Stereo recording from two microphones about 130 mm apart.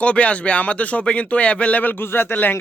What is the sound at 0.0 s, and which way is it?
Speech, 10° left (ahead or behind).